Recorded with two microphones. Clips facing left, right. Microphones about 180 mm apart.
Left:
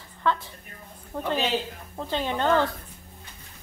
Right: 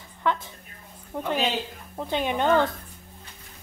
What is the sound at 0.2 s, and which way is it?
Speech, 15° right (ahead or behind).